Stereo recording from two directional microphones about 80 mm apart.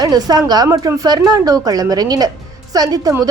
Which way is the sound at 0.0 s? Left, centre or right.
Right.